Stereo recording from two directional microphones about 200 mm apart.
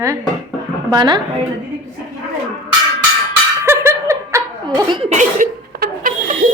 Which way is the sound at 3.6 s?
10° right (ahead or behind).